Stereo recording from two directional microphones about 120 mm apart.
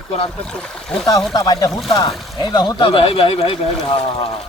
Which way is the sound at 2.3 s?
35° left (ahead or behind).